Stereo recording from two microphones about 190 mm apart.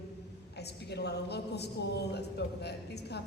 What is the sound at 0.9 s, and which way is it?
A man's voice, 60° left (ahead or behind).